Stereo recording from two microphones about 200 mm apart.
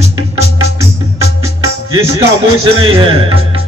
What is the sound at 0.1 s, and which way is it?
Music, 15° right (ahead or behind).